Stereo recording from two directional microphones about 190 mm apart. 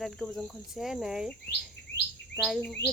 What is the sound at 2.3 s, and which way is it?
Speech, 5° left (ahead or behind).